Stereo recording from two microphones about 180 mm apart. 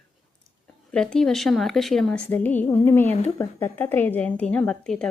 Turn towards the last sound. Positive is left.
turn(degrees=5)  # may be behind; listen again after turning